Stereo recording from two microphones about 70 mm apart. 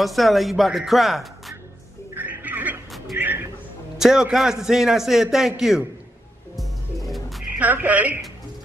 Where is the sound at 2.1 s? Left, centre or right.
Right.